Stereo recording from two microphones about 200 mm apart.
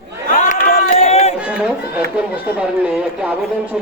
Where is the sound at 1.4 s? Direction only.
5° right (ahead or behind).